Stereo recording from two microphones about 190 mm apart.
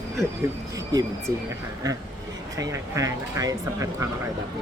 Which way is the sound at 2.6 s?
15° right (ahead or behind).